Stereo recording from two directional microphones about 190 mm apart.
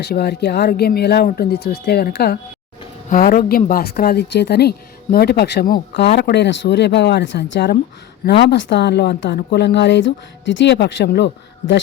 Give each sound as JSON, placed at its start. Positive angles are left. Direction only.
{"t": 0.0, "sound": "a woman's voice", "side_deg": 60}